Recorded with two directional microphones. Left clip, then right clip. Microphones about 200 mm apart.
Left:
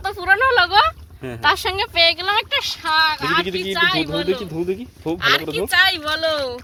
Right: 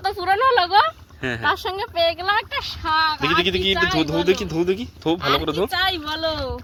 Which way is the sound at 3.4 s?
5° right (ahead or behind).